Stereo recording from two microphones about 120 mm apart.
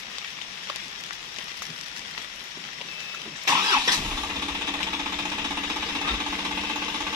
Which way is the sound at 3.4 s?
30° right (ahead or behind).